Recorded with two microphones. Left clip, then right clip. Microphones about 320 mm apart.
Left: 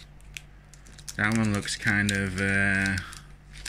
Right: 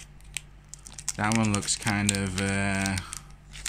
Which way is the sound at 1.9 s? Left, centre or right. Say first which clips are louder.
Left 4 dB; centre.